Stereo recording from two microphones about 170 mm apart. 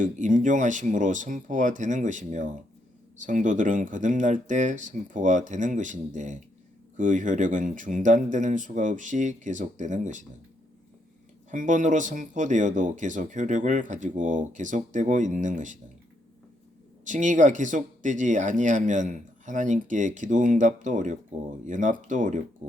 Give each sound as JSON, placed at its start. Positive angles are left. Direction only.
{"t": 0.0, "sound": "speech", "side_deg": -50}
{"t": 11.5, "sound": "speech", "side_deg": -50}
{"t": 17.1, "sound": "speech", "side_deg": -45}